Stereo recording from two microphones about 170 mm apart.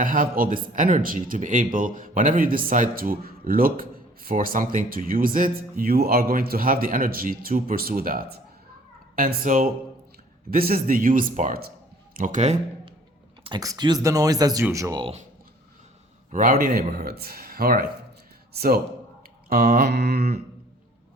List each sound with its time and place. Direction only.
0.0 s speech: 55° right (ahead or behind)
13.4 s speech: 25° right (ahead or behind)
16.3 s a man's voice: 55° right (ahead or behind)
19.5 s mantra: 60° right (ahead or behind); by 20.3 s 75° right (ahead or behind)